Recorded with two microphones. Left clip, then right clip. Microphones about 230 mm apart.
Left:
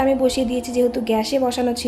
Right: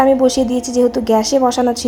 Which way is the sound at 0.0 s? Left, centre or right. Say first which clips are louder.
Right 6 dB; centre.